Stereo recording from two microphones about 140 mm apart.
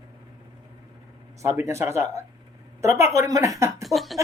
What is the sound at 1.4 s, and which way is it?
A woman's voice, 20° right (ahead or behind).